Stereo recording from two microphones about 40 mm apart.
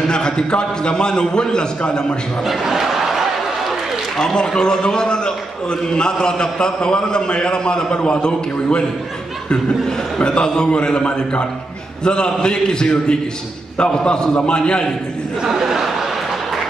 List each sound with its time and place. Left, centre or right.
0.1 s a man's voice: left
2.4 s a sound: centre
4.2 s a man's voice: centre
10.1 s a man's voice: left
15.4 s speech: centre